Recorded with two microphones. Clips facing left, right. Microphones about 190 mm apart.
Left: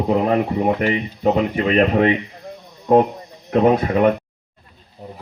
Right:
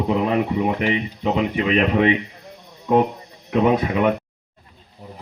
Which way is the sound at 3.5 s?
45° left (ahead or behind).